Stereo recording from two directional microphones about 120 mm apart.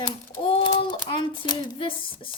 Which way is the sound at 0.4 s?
45° left (ahead or behind).